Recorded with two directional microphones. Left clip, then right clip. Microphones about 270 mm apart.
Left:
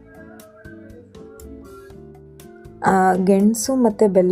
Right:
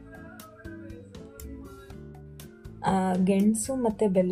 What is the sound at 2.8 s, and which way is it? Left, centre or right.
Music, left.